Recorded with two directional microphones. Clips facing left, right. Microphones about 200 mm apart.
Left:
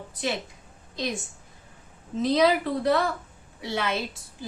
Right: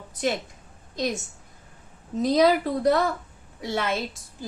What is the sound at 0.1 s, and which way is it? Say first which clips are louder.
Speech: right 4 dB; 45° right (ahead or behind).